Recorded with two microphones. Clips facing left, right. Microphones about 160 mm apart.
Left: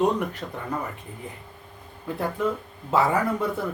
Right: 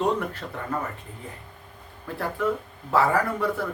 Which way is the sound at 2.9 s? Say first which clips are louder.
Even; 20° left (ahead or behind).